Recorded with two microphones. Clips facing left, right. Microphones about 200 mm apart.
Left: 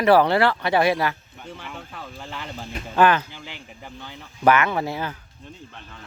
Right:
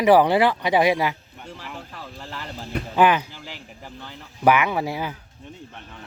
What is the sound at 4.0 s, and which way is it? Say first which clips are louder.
Speech: even; centre (ahead or behind).